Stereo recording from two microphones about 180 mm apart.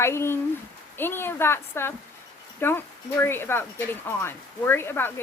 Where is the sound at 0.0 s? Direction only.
15° left (ahead or behind).